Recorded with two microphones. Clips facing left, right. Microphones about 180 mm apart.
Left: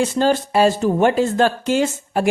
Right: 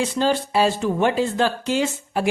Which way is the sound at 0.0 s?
45° left (ahead or behind).